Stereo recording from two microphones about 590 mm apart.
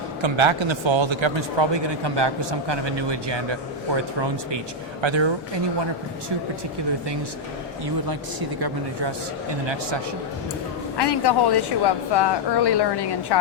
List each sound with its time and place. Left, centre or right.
0.2 s a man's voice: right
8.0 s speech: right
10.9 s a woman's voice: left